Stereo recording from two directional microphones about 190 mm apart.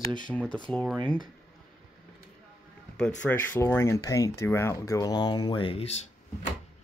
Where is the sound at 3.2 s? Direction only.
10° left (ahead or behind); by 6.0 s 30° left (ahead or behind).